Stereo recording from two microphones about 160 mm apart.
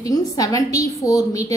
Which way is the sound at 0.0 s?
20° left (ahead or behind).